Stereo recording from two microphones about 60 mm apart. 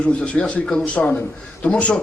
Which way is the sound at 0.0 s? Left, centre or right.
Left.